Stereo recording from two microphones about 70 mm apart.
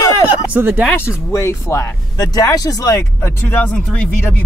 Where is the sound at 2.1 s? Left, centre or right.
Left.